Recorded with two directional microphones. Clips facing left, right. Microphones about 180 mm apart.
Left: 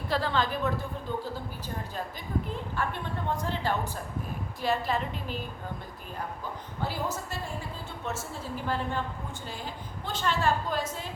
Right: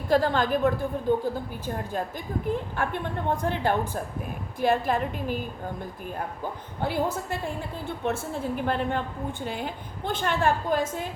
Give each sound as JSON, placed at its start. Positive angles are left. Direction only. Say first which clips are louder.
{"t": 0.1, "sound": "a woman's voice", "louder": "right 6 dB", "side_deg": -45}
{"t": 6.8, "sound": "a woman's voice", "louder": "right 6 dB", "side_deg": -60}